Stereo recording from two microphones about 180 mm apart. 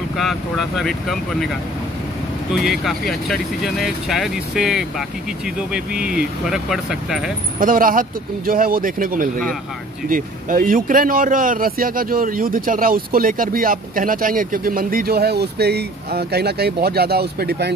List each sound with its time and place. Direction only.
0.2 s speech: centre (ahead or behind)
2.5 s speech: centre (ahead or behind)
7.5 s speech: 50° right (ahead or behind)